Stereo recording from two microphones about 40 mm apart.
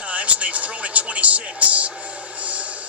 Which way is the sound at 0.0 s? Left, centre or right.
Right.